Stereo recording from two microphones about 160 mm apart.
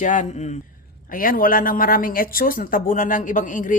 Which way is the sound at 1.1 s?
60° left (ahead or behind).